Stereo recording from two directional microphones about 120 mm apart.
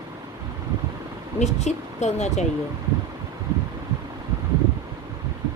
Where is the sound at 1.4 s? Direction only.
70° left (ahead or behind).